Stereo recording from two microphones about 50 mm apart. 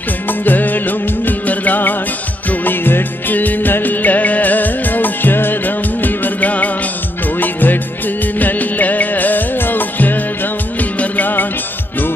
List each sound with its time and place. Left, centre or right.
0.3 s music: left